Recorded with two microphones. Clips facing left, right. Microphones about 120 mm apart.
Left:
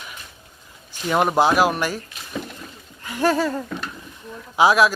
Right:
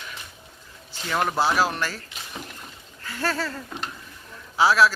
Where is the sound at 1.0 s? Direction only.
20° left (ahead or behind).